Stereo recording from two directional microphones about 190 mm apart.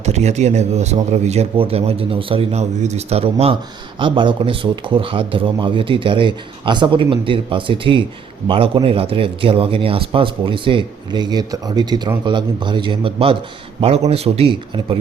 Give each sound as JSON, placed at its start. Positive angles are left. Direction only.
{"t": 0.0, "sound": "a man's voice", "side_deg": -35}